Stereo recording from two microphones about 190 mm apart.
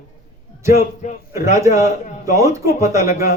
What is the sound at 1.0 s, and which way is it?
Speech, 40° left (ahead or behind).